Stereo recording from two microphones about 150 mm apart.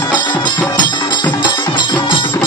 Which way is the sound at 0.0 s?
30° left (ahead or behind).